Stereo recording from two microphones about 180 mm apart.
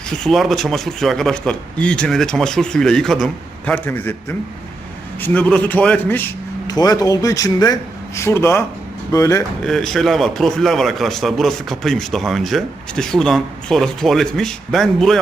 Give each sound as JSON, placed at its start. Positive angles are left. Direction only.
{"t": 0.1, "sound": "a man's voice", "side_deg": 5}
{"t": 9.6, "sound": "a man's voice", "side_deg": 0}